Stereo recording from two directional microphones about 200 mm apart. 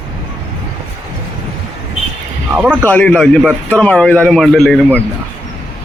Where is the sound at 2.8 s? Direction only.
10° left (ahead or behind).